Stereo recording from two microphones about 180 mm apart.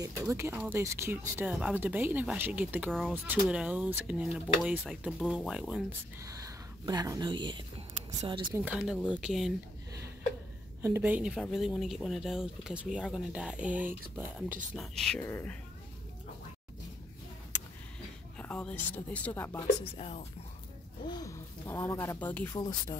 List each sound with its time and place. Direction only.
0.0 s speech: 15° right (ahead or behind)
2.9 s speech: 5° left (ahead or behind)
6.2 s a woman's voice: 20° right (ahead or behind)
8.5 s speech: 5° right (ahead or behind)
10.8 s speech: 10° right (ahead or behind)
14.8 s speech: centre (ahead or behind)
18.4 s speech: 5° left (ahead or behind)
19.8 s speech: 35° left (ahead or behind)
21.0 s speech: 20° left (ahead or behind)
22.6 s speech: 25° left (ahead or behind)